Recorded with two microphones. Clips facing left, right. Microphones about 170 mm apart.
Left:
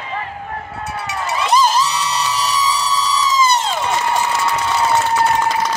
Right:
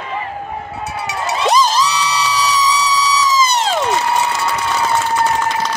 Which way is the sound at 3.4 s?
90° right.